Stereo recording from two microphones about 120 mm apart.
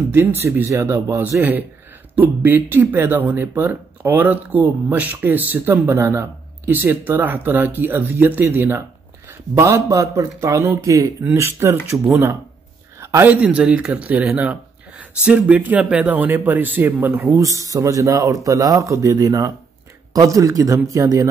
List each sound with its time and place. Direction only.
0.1 s speech: 20° right (ahead or behind)